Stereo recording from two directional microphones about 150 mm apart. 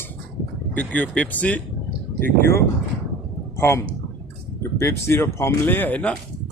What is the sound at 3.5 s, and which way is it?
A man's voice, 15° left (ahead or behind).